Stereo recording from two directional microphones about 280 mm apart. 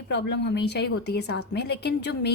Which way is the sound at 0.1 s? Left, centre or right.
Left.